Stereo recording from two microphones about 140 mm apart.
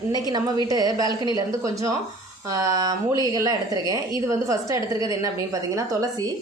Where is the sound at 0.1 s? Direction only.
30° right (ahead or behind).